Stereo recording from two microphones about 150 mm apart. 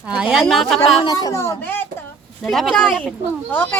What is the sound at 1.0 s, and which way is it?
Speech, 25° left (ahead or behind).